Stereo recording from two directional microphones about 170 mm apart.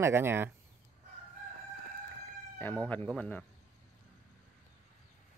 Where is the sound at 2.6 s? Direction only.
10° left (ahead or behind).